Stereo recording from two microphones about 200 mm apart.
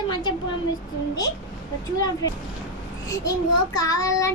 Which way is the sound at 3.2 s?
15° left (ahead or behind).